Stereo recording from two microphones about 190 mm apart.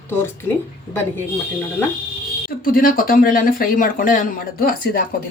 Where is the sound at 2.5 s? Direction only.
45° left (ahead or behind).